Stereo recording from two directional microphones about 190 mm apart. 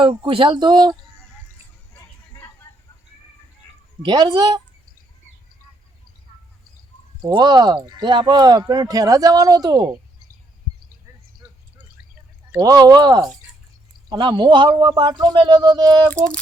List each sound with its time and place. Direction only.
0.0 s speech: 25° right (ahead or behind)
4.0 s speech: 20° right (ahead or behind)
7.2 s speech: 20° right (ahead or behind)
11.4 s drip: 15° right (ahead or behind)
12.5 s speech: 20° right (ahead or behind)